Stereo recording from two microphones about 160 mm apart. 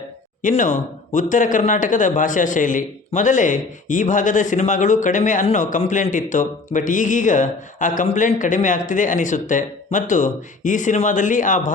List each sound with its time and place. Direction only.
0.4 s speech: 50° left (ahead or behind)